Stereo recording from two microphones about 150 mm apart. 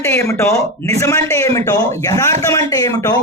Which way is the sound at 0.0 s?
15° left (ahead or behind).